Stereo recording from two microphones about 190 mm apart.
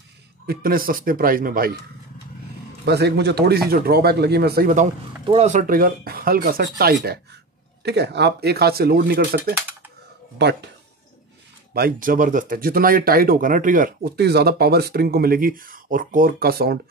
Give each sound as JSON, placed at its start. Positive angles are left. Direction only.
{"t": 0.5, "sound": "speech", "side_deg": -50}
{"t": 2.8, "sound": "speech", "side_deg": -60}
{"t": 5.2, "sound": "speech", "side_deg": -30}
{"t": 11.7, "sound": "speech", "side_deg": -50}